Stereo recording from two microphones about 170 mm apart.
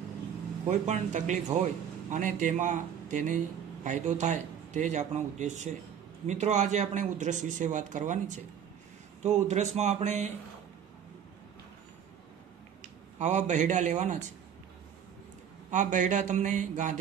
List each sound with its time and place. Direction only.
0.7 s a man's voice: 45° right (ahead or behind)
9.2 s speech: 40° right (ahead or behind)
13.2 s a man's voice: 45° right (ahead or behind)
15.7 s a man's voice: 45° right (ahead or behind)